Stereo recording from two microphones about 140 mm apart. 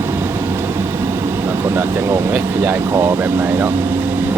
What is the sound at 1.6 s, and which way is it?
Speech, 20° right (ahead or behind).